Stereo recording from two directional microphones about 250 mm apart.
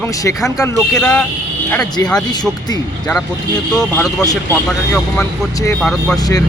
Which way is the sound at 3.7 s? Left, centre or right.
Centre.